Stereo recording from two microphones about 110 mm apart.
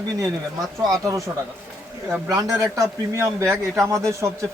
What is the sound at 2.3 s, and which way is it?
A man's voice, 30° right (ahead or behind).